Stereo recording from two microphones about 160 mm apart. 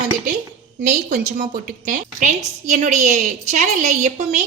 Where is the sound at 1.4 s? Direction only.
55° right (ahead or behind).